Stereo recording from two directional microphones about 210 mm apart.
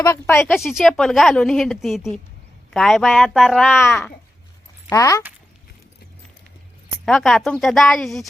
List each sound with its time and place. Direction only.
0.0 s speech: 10° left (ahead or behind)
0.5 s speech: centre (ahead or behind)
3.7 s speech: 10° left (ahead or behind)
7.0 s speech: 5° left (ahead or behind)